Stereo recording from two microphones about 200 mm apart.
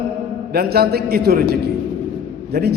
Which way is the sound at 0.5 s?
50° right (ahead or behind).